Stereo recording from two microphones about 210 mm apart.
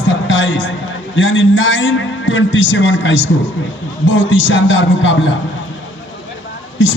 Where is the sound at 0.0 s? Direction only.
65° left (ahead or behind).